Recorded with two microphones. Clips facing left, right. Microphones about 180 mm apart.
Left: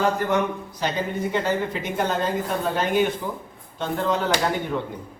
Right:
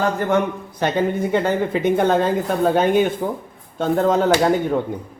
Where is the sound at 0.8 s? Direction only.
55° right (ahead or behind).